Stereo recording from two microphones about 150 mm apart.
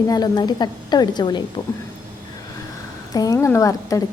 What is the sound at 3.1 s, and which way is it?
Speech, 25° left (ahead or behind).